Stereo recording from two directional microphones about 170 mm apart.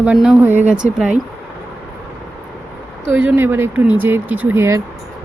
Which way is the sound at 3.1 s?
10° right (ahead or behind).